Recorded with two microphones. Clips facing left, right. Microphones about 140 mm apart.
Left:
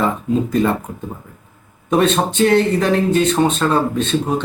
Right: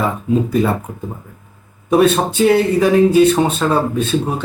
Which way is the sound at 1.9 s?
10° right (ahead or behind).